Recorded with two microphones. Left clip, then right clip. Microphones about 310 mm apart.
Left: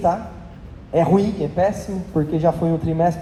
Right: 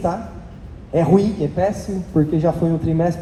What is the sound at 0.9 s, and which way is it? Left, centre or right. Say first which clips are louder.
Speech: right 1 dB; left.